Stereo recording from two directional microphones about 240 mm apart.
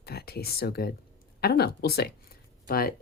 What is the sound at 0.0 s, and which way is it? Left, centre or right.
Speech, left.